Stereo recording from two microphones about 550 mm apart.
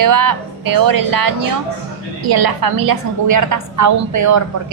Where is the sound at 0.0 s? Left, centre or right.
Right.